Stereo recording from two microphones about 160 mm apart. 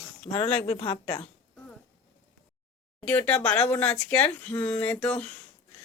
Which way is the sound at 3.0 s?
10° left (ahead or behind).